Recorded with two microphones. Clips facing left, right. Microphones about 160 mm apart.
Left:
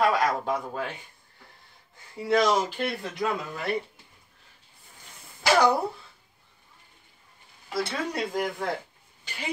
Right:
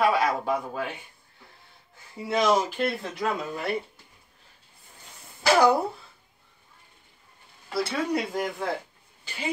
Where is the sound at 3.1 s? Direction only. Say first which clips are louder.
Even; 30° right (ahead or behind).